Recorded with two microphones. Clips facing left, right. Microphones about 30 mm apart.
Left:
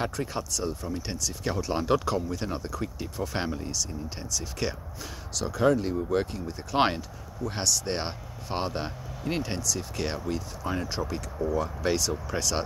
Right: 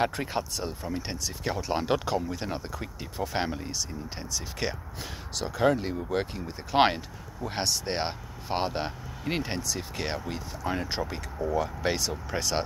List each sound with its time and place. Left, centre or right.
0.1 s speech: right